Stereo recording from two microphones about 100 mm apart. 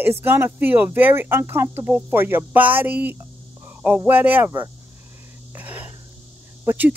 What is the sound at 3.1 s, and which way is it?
Insect, 20° right (ahead or behind).